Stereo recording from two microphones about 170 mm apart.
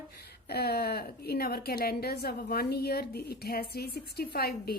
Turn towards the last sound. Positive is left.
turn(degrees=65)  # may be behind; listen again after turning